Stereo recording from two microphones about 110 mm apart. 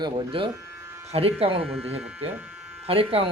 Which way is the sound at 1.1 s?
60° right (ahead or behind).